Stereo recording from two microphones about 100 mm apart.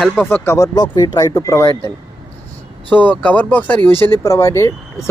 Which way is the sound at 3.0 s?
15° left (ahead or behind).